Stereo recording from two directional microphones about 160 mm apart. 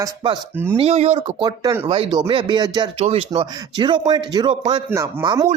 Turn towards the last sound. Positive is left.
turn(degrees=-25)  # may be behind; listen again after turning